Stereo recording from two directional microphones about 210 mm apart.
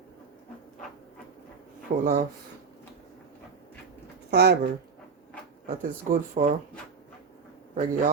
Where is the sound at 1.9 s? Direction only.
40° right (ahead or behind).